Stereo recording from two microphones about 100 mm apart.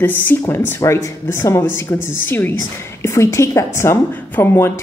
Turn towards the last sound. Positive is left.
turn(degrees=25)  # may be behind; listen again after turning